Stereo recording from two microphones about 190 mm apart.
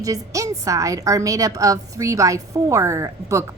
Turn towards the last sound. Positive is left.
turn(degrees=-15)  # may be behind; listen again after turning